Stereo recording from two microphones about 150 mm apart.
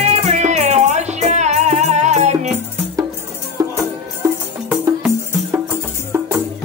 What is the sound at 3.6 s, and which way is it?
Music, 25° right (ahead or behind).